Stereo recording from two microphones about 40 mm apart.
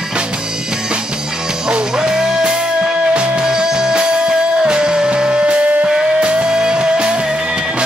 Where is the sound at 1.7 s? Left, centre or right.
Right.